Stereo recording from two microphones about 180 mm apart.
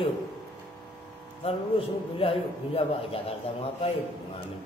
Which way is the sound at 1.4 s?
30° left (ahead or behind).